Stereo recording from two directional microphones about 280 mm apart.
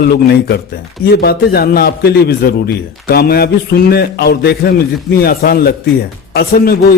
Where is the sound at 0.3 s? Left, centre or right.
Left.